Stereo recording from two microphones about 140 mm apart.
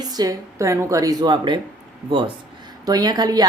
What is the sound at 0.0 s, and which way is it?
A woman's voice, 30° right (ahead or behind).